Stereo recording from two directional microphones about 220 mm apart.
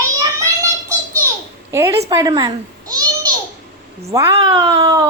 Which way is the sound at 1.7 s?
10° right (ahead or behind).